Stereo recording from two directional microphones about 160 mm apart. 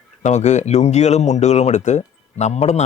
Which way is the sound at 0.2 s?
45° left (ahead or behind).